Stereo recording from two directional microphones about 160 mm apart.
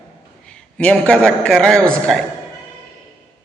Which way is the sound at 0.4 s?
5° left (ahead or behind).